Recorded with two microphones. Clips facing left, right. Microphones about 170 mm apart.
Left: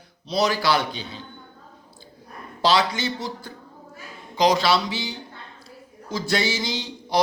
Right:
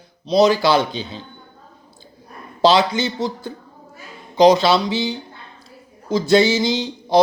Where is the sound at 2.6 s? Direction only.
25° right (ahead or behind).